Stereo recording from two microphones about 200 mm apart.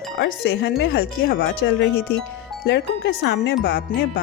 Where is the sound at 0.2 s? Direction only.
55° left (ahead or behind).